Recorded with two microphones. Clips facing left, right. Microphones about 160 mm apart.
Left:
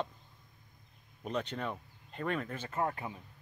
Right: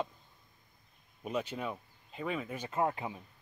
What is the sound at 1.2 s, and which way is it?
Speech, 5° right (ahead or behind).